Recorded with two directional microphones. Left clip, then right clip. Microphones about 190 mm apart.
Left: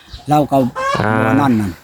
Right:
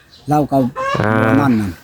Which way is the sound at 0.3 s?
5° left (ahead or behind).